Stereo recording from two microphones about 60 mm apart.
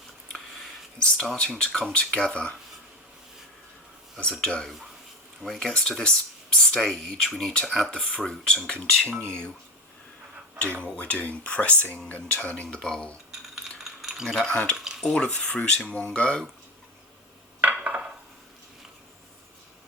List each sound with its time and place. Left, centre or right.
0.9 s speech: centre
4.2 s speech: centre
10.8 s speech: centre
13.6 s a sound: centre
14.4 s speech: centre
17.6 s a sound: right